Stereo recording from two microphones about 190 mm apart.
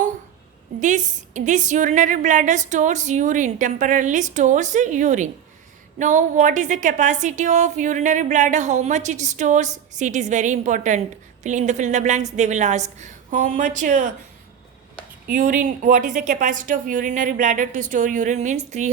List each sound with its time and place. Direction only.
0.8 s a woman's voice: 40° right (ahead or behind)
15.3 s speech: 45° right (ahead or behind)